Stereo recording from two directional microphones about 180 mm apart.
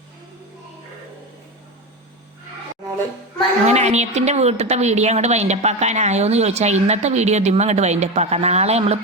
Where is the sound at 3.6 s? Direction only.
40° right (ahead or behind).